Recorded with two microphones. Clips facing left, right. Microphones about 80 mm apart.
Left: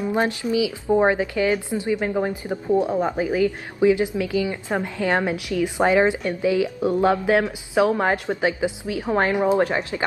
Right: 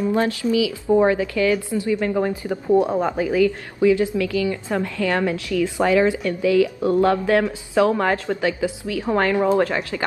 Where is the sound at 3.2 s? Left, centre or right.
Centre.